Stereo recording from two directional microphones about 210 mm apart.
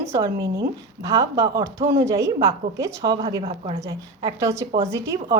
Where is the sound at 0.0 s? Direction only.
15° right (ahead or behind).